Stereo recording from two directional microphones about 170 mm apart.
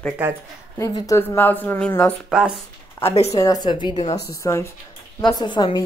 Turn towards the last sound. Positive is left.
turn(degrees=25)  # may be behind; listen again after turning